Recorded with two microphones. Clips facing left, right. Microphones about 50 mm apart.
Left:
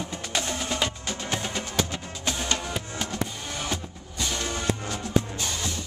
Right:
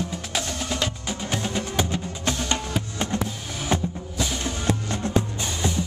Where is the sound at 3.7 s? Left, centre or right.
Right.